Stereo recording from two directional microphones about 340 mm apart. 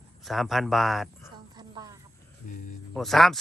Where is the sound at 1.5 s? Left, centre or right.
Centre.